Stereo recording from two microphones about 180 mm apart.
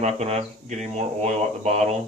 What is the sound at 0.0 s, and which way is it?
Speech, 35° right (ahead or behind).